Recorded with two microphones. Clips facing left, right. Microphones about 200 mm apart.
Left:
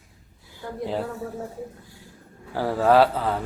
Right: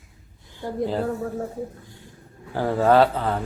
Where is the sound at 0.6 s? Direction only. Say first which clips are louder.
Right 4 dB; 30° right (ahead or behind).